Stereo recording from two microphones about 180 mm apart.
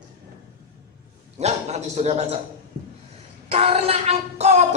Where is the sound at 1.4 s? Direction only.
40° right (ahead or behind).